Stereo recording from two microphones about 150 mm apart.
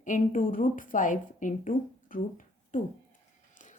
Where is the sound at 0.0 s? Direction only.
60° left (ahead or behind).